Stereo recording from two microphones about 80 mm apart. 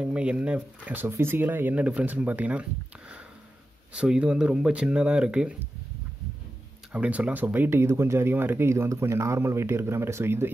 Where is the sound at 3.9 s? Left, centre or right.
Centre.